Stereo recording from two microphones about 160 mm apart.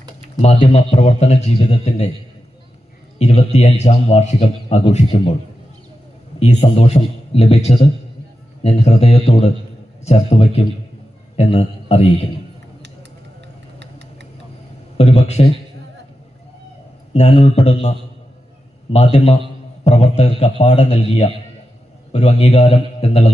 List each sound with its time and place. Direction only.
0.4 s a man's voice: 40° left (ahead or behind)
3.2 s a man's voice: 45° left (ahead or behind)
6.4 s a man's voice: 40° left (ahead or behind)
13.7 s vehicle: 90° right
14.9 s a man's voice: 40° left (ahead or behind)
17.2 s a man's voice: 45° left (ahead or behind)
18.9 s a man's voice: 40° left (ahead or behind)